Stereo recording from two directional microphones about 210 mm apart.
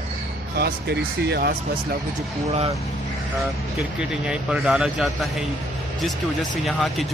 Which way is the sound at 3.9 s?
5° right (ahead or behind).